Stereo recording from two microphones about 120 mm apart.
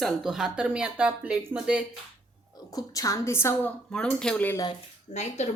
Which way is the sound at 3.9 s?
5° left (ahead or behind).